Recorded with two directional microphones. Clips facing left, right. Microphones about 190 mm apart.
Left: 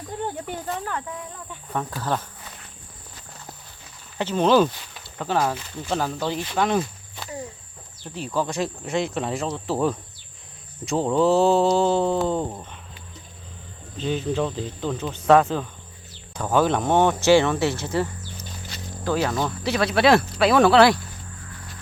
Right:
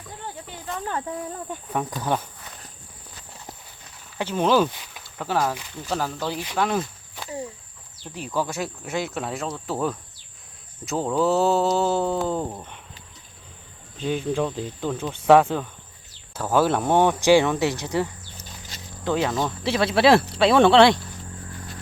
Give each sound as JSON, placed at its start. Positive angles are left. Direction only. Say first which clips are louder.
{"t": 1.7, "sound": "speech", "louder": "right 1 dB", "side_deg": -15}
{"t": 4.2, "sound": "speech", "louder": "left 2 dB", "side_deg": -10}
{"t": 8.4, "sound": "speech", "louder": "left 2 dB", "side_deg": -5}
{"t": 14.0, "sound": "speech", "louder": "even", "side_deg": -10}
{"t": 19.2, "sound": "speech", "louder": "even", "side_deg": -5}
{"t": 19.6, "sound": "speech", "louder": "right 1 dB", "side_deg": -25}